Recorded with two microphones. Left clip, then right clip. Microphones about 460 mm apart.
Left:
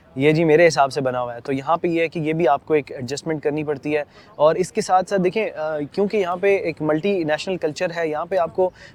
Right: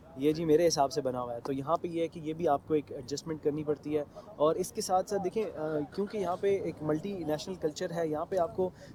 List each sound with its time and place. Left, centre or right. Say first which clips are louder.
0.2 s speech: left 12 dB; left